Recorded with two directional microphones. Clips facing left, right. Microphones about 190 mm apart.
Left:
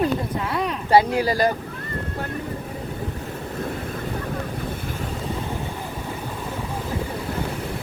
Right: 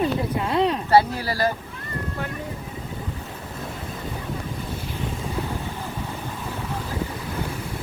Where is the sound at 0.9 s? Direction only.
15° left (ahead or behind).